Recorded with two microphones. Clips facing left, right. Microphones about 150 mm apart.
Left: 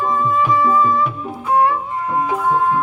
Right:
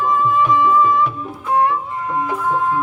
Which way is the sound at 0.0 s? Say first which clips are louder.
Right 1 dB; 35° left (ahead or behind).